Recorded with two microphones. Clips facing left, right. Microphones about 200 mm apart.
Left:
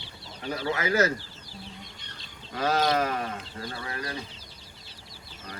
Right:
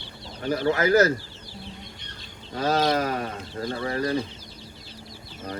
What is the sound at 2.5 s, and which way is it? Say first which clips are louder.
Speech: right 2 dB; 30° right (ahead or behind).